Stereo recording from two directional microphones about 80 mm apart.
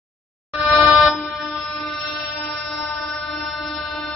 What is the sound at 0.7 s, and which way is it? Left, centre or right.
Vehicle, centre.